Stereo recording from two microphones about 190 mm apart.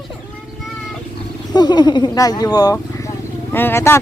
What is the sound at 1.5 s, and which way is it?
Speech, 20° left (ahead or behind).